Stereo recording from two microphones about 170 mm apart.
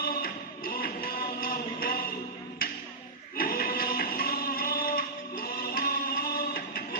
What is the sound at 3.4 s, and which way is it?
Music, 60° left (ahead or behind).